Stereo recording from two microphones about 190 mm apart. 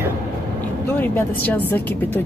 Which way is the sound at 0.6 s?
10° left (ahead or behind).